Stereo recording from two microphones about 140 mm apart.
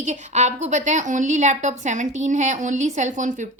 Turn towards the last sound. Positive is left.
turn(degrees=-60)  # may be behind; listen again after turning